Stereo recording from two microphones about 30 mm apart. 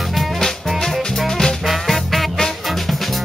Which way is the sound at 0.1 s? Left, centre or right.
Centre.